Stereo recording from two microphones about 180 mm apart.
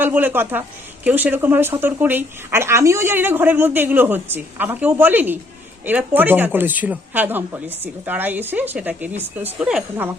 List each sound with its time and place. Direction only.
0.0 s speech: 10° right (ahead or behind)